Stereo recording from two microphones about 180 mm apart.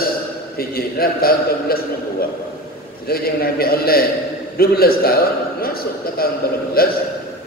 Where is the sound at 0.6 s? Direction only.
55° left (ahead or behind).